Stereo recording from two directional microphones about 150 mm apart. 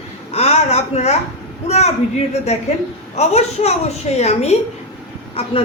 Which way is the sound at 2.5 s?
45° left (ahead or behind).